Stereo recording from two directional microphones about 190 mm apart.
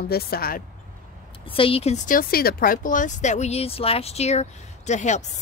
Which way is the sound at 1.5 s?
30° left (ahead or behind).